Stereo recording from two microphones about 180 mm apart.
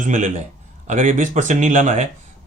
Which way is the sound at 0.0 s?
45° right (ahead or behind).